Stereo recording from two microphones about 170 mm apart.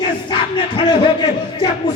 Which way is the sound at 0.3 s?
25° left (ahead or behind).